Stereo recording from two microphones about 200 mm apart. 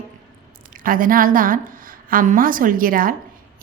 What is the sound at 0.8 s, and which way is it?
A woman's voice, 45° right (ahead or behind).